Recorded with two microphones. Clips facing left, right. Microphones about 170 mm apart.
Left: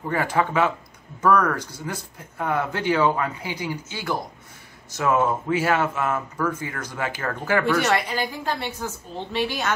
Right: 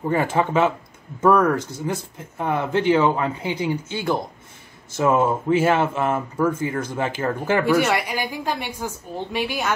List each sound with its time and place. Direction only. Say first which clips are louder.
0.1 s speech: right 2 dB; 25° right (ahead or behind)
7.6 s a woman's voice: right 2 dB; 10° right (ahead or behind)